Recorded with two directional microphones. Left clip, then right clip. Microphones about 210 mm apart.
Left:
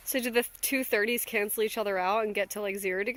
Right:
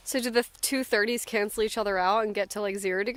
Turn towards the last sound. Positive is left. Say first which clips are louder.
# right 2 dB
turn(degrees=-20)  # may be behind; listen again after turning